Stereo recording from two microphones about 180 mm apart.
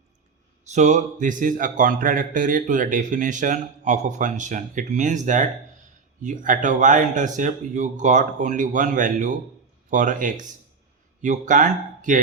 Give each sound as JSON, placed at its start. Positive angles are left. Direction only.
{"t": 0.7, "sound": "speech", "side_deg": -40}